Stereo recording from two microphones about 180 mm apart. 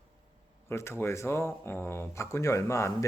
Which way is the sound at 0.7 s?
15° left (ahead or behind).